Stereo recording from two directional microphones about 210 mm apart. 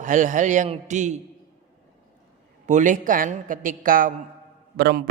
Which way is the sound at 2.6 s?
35° right (ahead or behind).